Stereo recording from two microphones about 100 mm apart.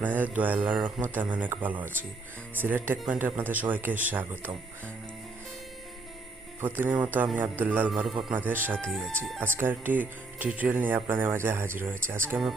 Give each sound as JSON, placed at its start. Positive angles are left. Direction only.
{"t": 0.0, "sound": "speech", "side_deg": -15}
{"t": 6.6, "sound": "speech", "side_deg": -20}
{"t": 8.0, "sound": "speech", "side_deg": -5}
{"t": 8.4, "sound": "speech", "side_deg": -20}
{"t": 8.8, "sound": "speech", "side_deg": 0}
{"t": 9.6, "sound": "speech", "side_deg": -20}